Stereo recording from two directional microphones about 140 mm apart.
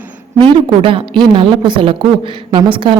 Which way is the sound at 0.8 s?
40° right (ahead or behind).